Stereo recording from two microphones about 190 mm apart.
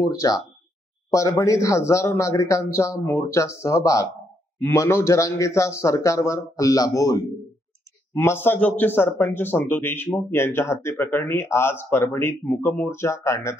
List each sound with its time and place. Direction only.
0.0 s a man's voice: 15° left (ahead or behind)